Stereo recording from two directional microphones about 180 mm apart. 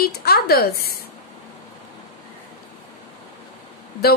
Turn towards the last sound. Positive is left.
turn(degrees=60)  # may be behind; listen again after turning